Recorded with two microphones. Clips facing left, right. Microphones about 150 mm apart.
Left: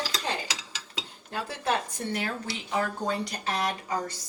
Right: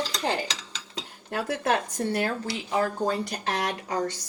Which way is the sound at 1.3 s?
65° right (ahead or behind).